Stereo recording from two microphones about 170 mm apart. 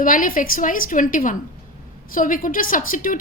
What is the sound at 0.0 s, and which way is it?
A woman's voice, 55° left (ahead or behind).